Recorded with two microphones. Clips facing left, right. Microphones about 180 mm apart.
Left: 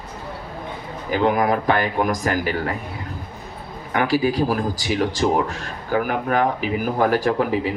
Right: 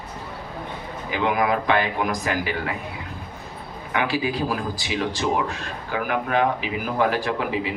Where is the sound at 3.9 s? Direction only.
40° left (ahead or behind).